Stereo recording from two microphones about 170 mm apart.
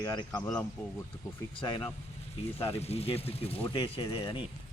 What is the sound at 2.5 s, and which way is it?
Speech, 35° left (ahead or behind).